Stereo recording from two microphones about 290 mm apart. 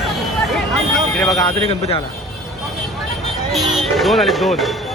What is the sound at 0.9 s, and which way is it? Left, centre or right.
Vehicle, centre.